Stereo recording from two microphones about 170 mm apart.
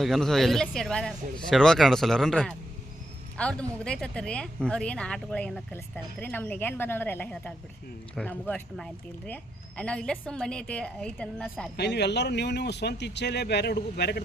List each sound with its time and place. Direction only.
0.0 s a woman's voice: centre (ahead or behind)
11.8 s speech: 80° left